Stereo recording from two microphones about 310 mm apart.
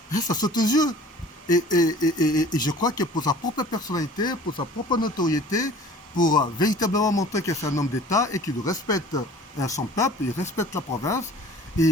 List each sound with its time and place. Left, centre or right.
0.3 s speech: centre
1.5 s speech: left
1.8 s speech: centre